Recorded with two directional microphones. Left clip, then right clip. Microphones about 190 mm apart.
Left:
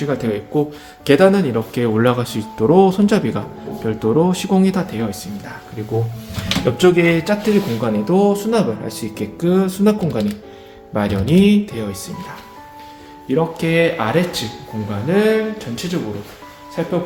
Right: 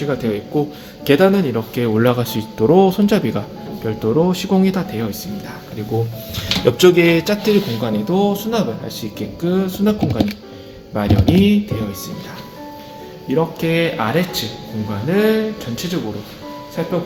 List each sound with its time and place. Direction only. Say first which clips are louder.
0.1 s speech: even; 15° right (ahead or behind)
6.7 s a man's voice: right 2 dB; 25° right (ahead or behind)
7.8 s speech: left 2 dB; centre (ahead or behind)
13.2 s a man's voice: even; 20° right (ahead or behind)